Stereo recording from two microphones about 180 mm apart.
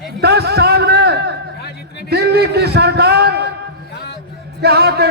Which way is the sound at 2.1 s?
65° right (ahead or behind).